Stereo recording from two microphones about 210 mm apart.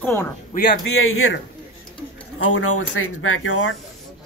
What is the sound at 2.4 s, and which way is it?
Speech, 90° left.